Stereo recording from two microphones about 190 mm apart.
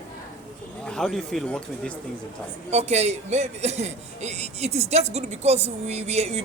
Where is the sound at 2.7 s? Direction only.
35° right (ahead or behind).